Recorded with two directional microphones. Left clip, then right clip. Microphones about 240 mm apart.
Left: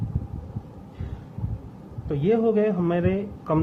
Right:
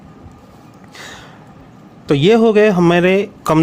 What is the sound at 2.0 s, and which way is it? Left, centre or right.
Speech, right.